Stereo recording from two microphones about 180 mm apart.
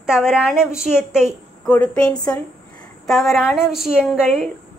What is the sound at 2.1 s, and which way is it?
Speech, 20° left (ahead or behind).